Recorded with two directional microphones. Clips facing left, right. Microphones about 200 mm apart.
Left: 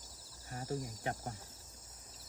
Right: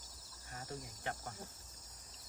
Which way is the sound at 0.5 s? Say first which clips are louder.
Left 7 dB; 30° left (ahead or behind).